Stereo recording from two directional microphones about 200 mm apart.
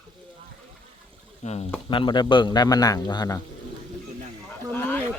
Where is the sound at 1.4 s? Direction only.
35° left (ahead or behind).